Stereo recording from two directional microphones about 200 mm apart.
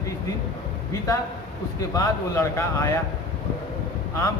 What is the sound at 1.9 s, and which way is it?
Speech, 15° left (ahead or behind).